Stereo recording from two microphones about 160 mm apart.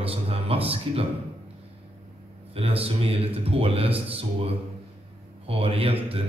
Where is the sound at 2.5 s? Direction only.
35° right (ahead or behind).